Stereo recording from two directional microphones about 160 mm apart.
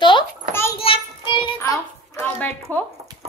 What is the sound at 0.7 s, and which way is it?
Child singing, 35° left (ahead or behind).